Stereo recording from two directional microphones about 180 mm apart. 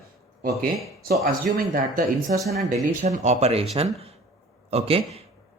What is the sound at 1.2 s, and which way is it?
Speech, 50° right (ahead or behind).